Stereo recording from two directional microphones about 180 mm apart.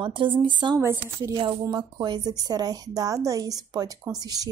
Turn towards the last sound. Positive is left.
turn(degrees=-20)  # may be behind; listen again after turning